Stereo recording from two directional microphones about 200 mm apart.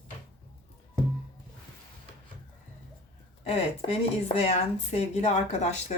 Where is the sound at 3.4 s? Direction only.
30° left (ahead or behind).